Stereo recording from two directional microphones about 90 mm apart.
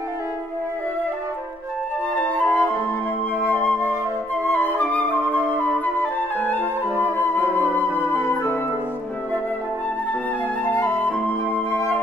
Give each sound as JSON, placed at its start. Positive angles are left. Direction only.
{"t": 2.2, "sound": "flute", "side_deg": 15}
{"t": 7.5, "sound": "music", "side_deg": -25}
{"t": 10.6, "sound": "flute", "side_deg": 15}